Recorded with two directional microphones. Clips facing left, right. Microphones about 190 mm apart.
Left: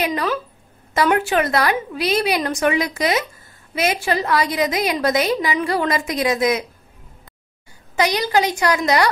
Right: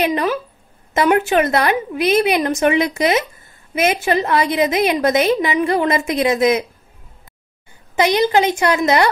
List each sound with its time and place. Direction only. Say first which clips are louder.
0.0 s a woman's voice: right 3 dB; 20° right (ahead or behind)
7.9 s a woman's voice: right 4 dB; 20° right (ahead or behind)